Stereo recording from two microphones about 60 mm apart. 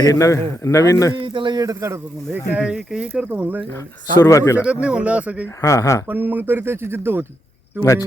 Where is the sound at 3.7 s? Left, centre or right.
Left.